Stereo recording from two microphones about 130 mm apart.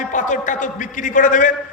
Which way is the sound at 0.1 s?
75° left (ahead or behind).